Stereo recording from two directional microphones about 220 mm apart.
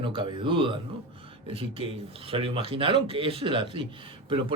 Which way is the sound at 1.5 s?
25° right (ahead or behind).